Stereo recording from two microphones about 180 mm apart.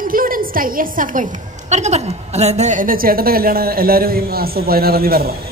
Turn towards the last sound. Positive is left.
turn(degrees=-55)  # may be behind; listen again after turning